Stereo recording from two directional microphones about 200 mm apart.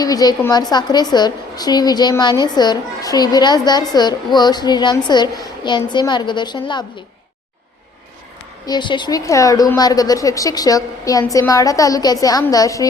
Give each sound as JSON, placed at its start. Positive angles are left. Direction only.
{"t": 0.0, "sound": "a woman's voice", "side_deg": 20}
{"t": 8.6, "sound": "a woman's voice", "side_deg": 20}